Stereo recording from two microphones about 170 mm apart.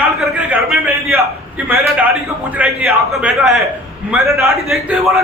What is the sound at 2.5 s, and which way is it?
A man's voice, 5° right (ahead or behind).